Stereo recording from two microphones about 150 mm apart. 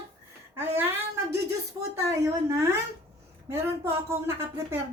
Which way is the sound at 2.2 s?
20° right (ahead or behind).